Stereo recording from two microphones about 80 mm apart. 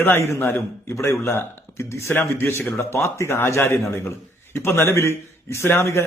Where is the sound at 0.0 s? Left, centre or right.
Left.